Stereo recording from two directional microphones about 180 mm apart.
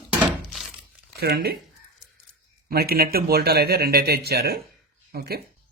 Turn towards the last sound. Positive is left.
turn(degrees=-55)  # may be behind; listen again after turning